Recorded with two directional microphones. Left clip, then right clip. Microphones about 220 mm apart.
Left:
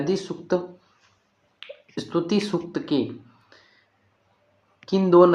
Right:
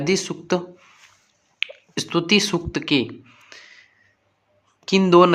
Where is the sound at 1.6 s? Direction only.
35° right (ahead or behind).